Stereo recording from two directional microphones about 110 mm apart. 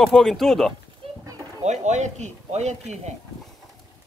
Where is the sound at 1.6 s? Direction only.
90° right.